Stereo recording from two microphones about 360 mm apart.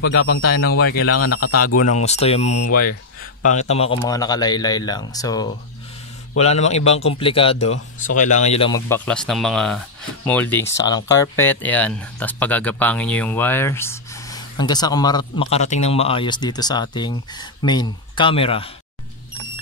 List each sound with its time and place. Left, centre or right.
0.0 s speech: left
1.9 s speech: centre